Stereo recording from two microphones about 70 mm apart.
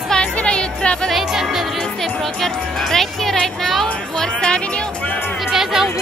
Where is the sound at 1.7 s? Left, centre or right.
Centre.